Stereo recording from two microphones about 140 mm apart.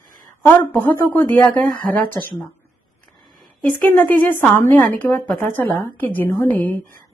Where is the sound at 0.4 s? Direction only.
15° left (ahead or behind).